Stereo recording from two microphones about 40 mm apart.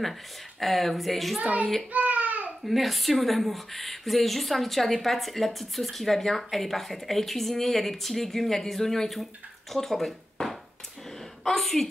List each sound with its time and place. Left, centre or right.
0.6 s speech: centre
1.4 s a child's voice: right
1.9 s baby cry: right
2.6 s speech: centre